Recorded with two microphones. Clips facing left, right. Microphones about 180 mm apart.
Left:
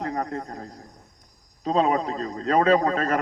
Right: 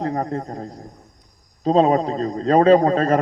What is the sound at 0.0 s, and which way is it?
A man's voice, 30° right (ahead or behind).